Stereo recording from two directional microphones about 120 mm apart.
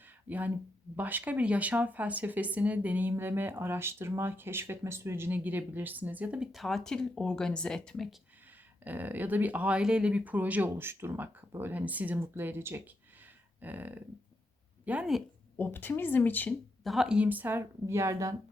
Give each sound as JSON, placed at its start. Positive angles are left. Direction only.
{"t": 0.3, "sound": "speech", "side_deg": -15}
{"t": 8.8, "sound": "speech", "side_deg": -15}
{"t": 15.5, "sound": "speech", "side_deg": 15}
{"t": 16.8, "sound": "speech", "side_deg": 0}